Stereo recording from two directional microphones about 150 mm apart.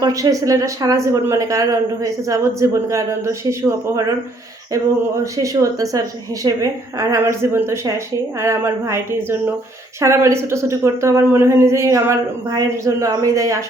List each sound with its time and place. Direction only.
0.0 s a woman's voice: 20° right (ahead or behind)
5.2 s a woman's voice: 20° right (ahead or behind)